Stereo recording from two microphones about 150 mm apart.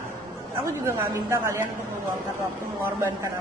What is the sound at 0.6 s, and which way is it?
A woman's voice, 15° right (ahead or behind).